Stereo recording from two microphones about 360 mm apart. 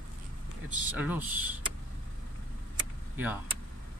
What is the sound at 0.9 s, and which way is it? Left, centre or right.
Speech, centre.